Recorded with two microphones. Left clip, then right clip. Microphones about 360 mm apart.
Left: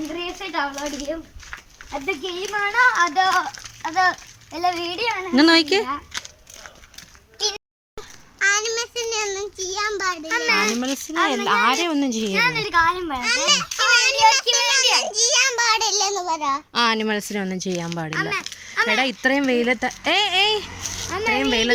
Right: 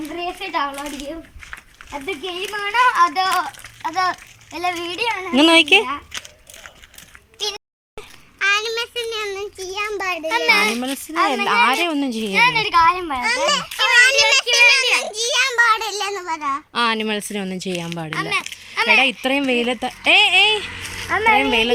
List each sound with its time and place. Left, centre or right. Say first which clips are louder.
0.4 s a child's voice: right 3 dB; centre
2.5 s a child's voice: right 1 dB; centre
7.3 s a child's voice: left 1 dB; centre
13.2 s a child's voice: even; centre
14.0 s child singing: right 5 dB; centre
14.5 s a child's voice: right 5 dB; centre
16.7 s a child's voice: right 1 dB; centre
20.8 s a sound: right 1 dB; centre
21.1 s speech: right 7 dB; right
21.3 s a child's voice: right 4 dB; centre